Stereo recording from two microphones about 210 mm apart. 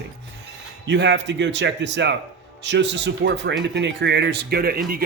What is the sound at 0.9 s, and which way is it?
Speech, 55° right (ahead or behind).